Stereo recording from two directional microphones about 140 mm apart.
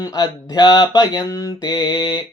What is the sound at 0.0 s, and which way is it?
Speech, 25° left (ahead or behind).